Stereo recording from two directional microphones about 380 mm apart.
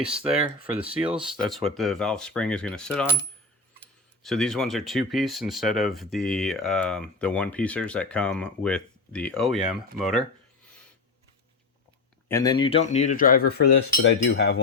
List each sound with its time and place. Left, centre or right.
0.0 s speech: centre
4.2 s speech: centre
12.3 s cutlery: centre; by 14.5 s left